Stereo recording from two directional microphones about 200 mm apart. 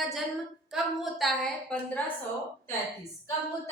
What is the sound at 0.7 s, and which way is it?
A woman's voice, centre (ahead or behind).